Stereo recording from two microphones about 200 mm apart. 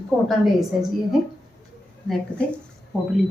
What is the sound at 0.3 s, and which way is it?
Speech, centre (ahead or behind).